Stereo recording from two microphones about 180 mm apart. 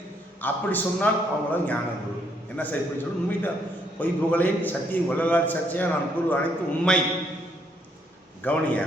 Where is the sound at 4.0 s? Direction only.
10° left (ahead or behind).